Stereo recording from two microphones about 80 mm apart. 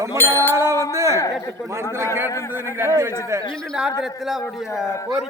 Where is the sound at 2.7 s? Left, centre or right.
Right.